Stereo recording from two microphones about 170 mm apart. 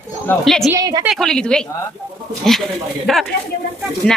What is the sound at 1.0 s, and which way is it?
Speech, centre (ahead or behind).